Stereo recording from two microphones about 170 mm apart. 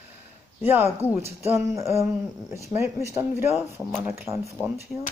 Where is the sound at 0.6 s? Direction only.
15° right (ahead or behind).